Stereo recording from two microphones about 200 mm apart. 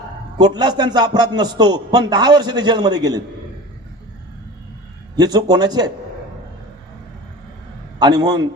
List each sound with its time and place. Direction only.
0.3 s a man's voice: 20° right (ahead or behind)
5.1 s a man's voice: 20° right (ahead or behind)
7.9 s a man's voice: 20° right (ahead or behind)